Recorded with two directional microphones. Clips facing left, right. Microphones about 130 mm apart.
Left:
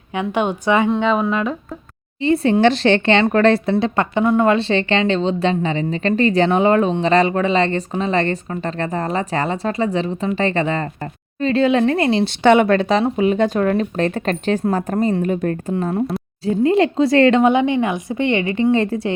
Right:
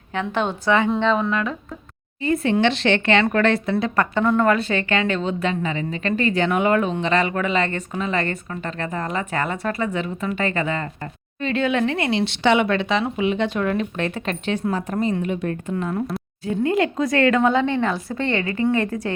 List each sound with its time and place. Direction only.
0.1 s a woman's voice: 15° left (ahead or behind)
2.2 s speech: 30° left (ahead or behind)
4.1 s a woman's voice: 15° left (ahead or behind)
4.5 s speech: 25° left (ahead or behind); by 15.5 s 40° left (ahead or behind)
15.7 s a woman's voice: 30° left (ahead or behind)
17.4 s a woman's voice: 15° left (ahead or behind)